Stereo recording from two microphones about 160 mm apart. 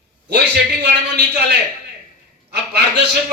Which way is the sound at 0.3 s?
90° right.